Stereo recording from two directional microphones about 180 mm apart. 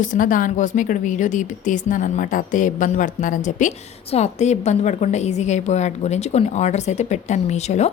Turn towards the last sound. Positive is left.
turn(degrees=40)  # may be behind; listen again after turning